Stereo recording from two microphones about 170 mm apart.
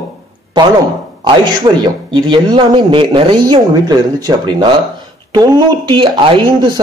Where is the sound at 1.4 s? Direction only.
25° right (ahead or behind).